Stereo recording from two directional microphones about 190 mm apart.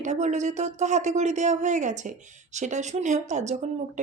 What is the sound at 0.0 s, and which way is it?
Speech, 40° right (ahead or behind).